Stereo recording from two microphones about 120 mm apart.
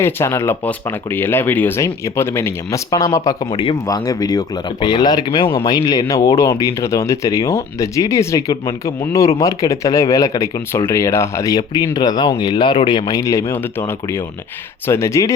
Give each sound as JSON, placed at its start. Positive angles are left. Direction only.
{"t": 0.0, "sound": "speech", "side_deg": 20}
{"t": 3.5, "sound": "speech", "side_deg": 50}
{"t": 3.8, "sound": "speech", "side_deg": 30}